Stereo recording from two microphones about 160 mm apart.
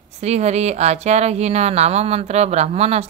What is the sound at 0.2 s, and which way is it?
Speech, 45° right (ahead or behind).